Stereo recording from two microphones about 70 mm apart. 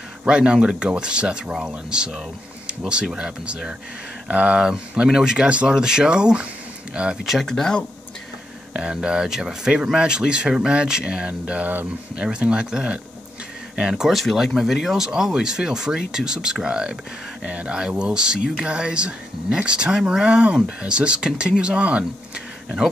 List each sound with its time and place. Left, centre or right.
0.2 s speech: centre
7.2 s speech: centre
8.7 s speech: centre
12.2 s speech: centre